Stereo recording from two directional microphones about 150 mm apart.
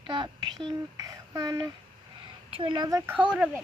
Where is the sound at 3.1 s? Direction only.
5° right (ahead or behind).